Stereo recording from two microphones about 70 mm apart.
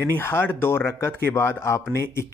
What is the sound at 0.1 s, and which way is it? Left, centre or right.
Speech, left.